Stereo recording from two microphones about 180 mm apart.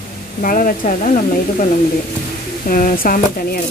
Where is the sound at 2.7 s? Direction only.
50° left (ahead or behind).